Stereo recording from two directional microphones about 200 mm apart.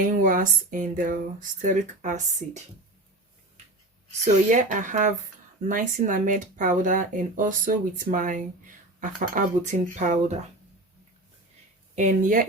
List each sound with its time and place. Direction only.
0.0 s speech: 40° right (ahead or behind)
4.4 s speech: 40° right (ahead or behind)
11.9 s speech: 40° right (ahead or behind)